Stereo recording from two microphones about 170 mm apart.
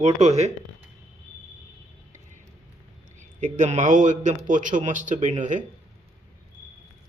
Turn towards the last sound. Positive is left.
turn(degrees=-50)  # may be behind; listen again after turning